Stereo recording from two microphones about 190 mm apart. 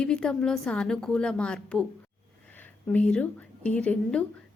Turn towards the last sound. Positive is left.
turn(degrees=5)  # may be behind; listen again after turning